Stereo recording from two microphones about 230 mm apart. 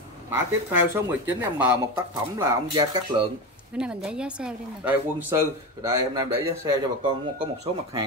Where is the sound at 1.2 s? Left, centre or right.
Centre.